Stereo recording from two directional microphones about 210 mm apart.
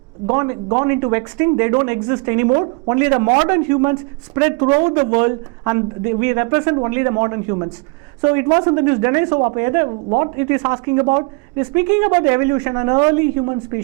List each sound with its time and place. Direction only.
0.3 s speech: 15° right (ahead or behind)